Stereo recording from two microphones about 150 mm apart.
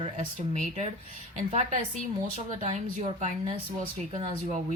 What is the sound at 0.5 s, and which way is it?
Speech, 55° right (ahead or behind).